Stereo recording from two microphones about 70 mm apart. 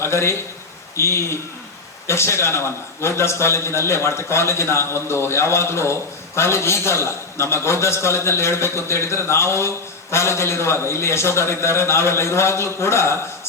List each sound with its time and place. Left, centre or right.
0.0 s a man's voice: left